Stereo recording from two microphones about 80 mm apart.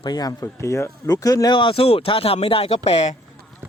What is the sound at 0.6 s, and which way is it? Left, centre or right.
Speech, left.